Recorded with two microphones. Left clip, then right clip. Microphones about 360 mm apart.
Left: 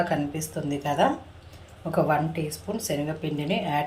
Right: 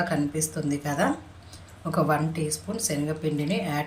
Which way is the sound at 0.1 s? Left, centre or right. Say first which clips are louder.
Even; centre.